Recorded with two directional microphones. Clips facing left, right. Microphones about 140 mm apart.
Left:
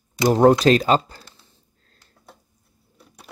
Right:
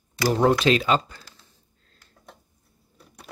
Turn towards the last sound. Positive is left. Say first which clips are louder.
# right 1 dB
turn(degrees=5)  # may be behind; listen again after turning